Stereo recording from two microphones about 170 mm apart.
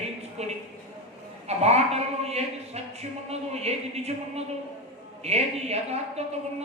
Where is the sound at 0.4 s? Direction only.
40° right (ahead or behind).